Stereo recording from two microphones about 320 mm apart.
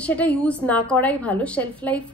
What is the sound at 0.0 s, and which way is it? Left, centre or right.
A woman's voice, centre.